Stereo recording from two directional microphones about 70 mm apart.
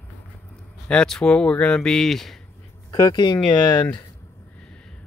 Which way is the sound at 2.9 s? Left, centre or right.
Left.